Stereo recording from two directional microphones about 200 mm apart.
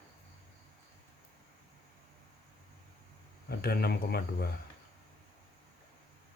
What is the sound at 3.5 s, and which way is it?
Speech, 50° left (ahead or behind).